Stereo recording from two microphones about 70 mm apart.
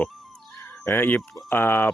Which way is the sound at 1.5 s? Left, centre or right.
Left.